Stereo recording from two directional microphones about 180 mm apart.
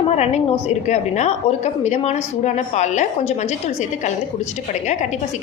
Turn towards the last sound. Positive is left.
turn(degrees=40)  # may be behind; listen again after turning